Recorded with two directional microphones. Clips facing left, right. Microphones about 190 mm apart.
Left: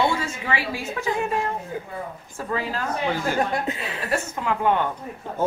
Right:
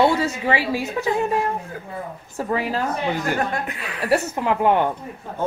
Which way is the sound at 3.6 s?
25° left (ahead or behind).